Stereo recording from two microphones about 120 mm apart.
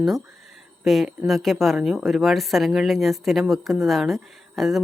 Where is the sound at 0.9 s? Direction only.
Centre (ahead or behind).